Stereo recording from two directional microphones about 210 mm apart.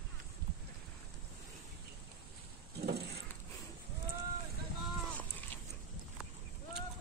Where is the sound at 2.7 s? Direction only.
50° right (ahead or behind).